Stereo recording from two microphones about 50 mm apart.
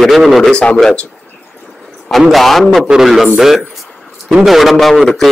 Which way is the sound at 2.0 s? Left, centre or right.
Centre.